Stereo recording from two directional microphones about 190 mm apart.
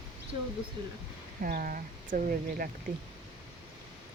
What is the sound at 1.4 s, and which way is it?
Speech, 45° right (ahead or behind).